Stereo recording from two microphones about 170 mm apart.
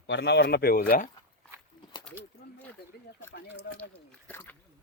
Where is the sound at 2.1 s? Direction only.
5° left (ahead or behind).